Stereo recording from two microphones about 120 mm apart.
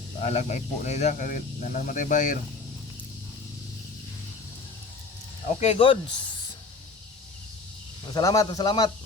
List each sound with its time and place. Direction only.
0.2 s speech: 70° left (ahead or behind); by 2.4 s 90° left
5.5 s speech: 55° left (ahead or behind)
8.0 s speech: 35° left (ahead or behind)